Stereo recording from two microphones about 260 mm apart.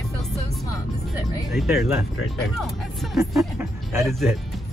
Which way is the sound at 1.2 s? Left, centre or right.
Centre.